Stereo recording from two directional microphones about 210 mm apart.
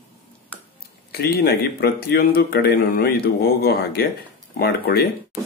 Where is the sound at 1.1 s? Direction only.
50° left (ahead or behind).